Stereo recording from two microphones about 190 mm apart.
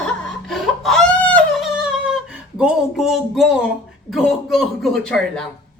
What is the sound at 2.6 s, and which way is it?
Speech, 5° right (ahead or behind).